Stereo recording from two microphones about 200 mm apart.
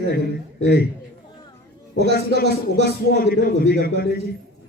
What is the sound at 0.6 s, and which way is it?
Speech, 55° left (ahead or behind).